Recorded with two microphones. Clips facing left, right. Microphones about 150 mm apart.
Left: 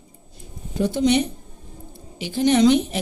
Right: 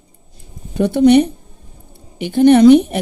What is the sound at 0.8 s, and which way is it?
A woman's voice, 60° right (ahead or behind).